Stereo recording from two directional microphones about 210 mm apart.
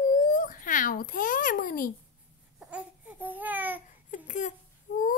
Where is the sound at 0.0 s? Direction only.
40° left (ahead or behind).